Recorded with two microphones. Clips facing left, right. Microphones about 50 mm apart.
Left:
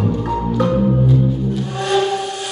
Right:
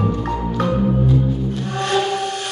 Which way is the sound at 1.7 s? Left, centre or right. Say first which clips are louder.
Left 1 dB; right.